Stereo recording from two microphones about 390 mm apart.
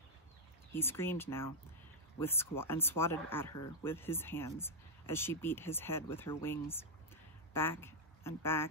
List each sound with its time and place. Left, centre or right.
0.7 s speech: centre